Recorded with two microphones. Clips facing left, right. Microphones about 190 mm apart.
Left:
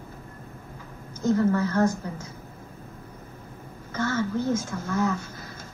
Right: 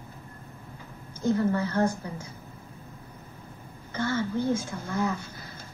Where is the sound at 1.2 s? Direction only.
30° right (ahead or behind).